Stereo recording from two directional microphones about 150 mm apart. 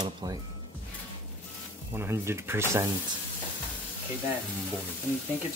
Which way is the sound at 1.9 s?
15° right (ahead or behind).